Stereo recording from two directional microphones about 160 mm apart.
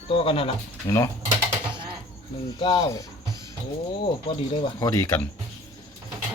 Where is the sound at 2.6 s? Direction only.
25° left (ahead or behind).